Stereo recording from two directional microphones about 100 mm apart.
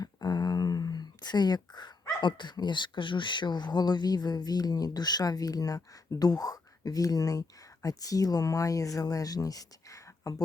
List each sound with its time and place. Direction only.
0.0 s speech: 45° left (ahead or behind)